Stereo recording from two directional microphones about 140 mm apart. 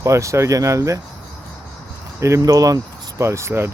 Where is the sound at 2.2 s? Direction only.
20° right (ahead or behind).